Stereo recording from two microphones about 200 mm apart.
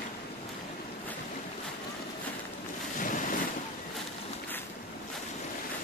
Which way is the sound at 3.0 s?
40° left (ahead or behind).